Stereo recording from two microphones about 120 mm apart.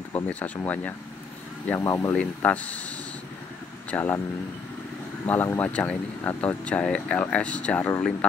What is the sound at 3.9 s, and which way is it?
Speech, 15° left (ahead or behind).